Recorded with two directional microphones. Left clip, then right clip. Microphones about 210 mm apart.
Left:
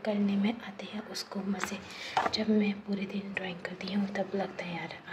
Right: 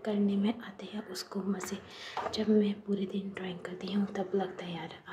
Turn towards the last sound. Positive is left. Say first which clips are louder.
# left 1 dB
turn(degrees=-15)  # may be behind; listen again after turning